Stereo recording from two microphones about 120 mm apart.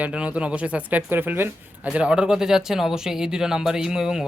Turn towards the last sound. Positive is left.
turn(degrees=-5)  # may be behind; listen again after turning